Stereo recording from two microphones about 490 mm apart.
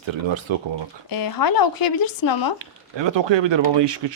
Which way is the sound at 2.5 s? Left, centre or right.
Right.